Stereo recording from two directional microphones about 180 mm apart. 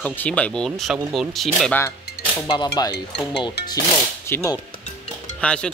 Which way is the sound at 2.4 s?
25° left (ahead or behind).